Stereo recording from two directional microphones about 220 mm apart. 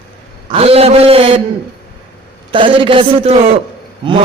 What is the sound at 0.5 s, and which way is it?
Speech, 25° right (ahead or behind).